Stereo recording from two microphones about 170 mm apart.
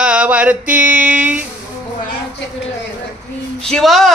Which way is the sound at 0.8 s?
10° right (ahead or behind).